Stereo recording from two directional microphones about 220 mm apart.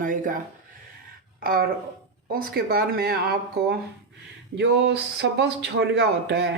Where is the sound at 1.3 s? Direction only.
40° right (ahead or behind).